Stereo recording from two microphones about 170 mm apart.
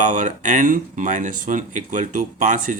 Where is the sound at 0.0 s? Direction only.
50° right (ahead or behind).